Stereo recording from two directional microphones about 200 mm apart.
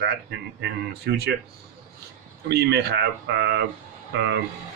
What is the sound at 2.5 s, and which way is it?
Speech, 55° right (ahead or behind).